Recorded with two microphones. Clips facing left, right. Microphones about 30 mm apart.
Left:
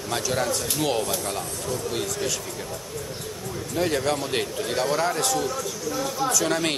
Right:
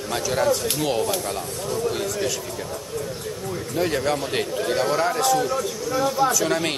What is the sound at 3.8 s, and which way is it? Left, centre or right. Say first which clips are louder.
A man's voice: right 1 dB; centre.